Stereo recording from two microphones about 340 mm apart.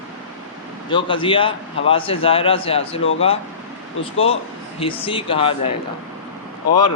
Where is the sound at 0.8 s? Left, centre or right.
Centre.